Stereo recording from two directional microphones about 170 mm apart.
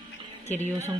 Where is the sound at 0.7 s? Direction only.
10° right (ahead or behind).